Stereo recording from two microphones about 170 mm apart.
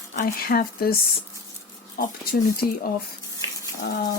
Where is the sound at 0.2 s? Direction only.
60° left (ahead or behind).